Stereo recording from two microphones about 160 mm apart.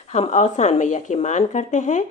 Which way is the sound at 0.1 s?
45° left (ahead or behind).